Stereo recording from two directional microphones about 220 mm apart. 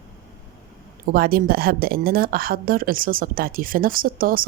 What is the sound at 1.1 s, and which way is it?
A woman's voice, 40° right (ahead or behind).